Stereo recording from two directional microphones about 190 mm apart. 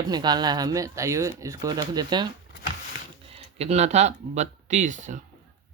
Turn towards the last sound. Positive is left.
turn(degrees=-40)  # may be behind; listen again after turning